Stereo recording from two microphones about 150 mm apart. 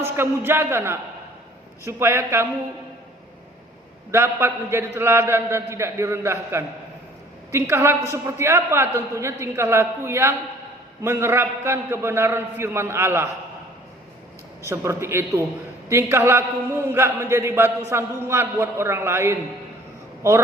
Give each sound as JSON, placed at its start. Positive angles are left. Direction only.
{"t": 0.0, "sound": "a man's voice", "side_deg": -15}
{"t": 4.1, "sound": "a man's voice", "side_deg": -15}
{"t": 14.7, "sound": "a man's voice", "side_deg": -15}